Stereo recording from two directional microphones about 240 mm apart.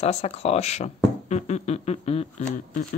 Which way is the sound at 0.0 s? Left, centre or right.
Left.